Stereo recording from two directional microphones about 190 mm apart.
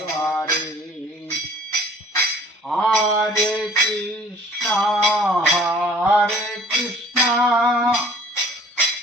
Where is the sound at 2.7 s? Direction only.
Centre (ahead or behind).